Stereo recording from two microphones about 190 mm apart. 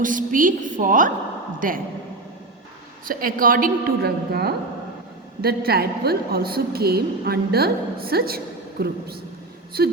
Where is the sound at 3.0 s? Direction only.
45° right (ahead or behind).